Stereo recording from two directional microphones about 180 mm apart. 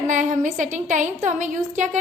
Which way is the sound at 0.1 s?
45° right (ahead or behind).